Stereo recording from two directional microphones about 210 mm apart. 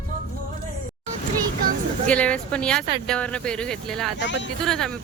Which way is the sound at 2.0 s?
5° left (ahead or behind).